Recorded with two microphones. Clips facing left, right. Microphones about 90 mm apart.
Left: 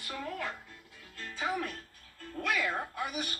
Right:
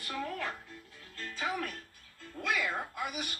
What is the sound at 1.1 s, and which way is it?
Music, 15° left (ahead or behind).